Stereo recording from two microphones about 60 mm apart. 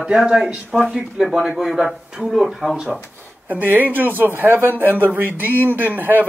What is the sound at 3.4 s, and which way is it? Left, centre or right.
Speech, right.